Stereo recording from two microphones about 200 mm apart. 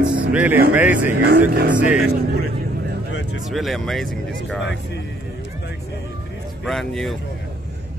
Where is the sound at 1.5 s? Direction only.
50° right (ahead or behind).